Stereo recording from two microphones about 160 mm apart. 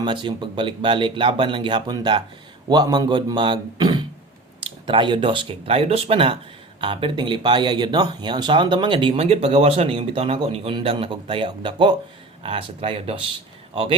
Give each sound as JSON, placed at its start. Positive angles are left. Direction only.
{"t": 0.0, "sound": "a man's voice", "side_deg": -30}